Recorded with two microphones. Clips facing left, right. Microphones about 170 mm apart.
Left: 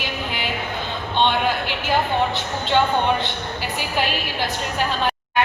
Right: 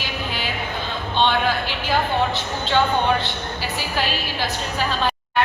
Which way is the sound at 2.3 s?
15° left (ahead or behind).